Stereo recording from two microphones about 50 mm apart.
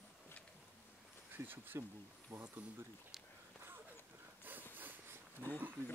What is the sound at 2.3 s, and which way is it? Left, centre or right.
Speech, right.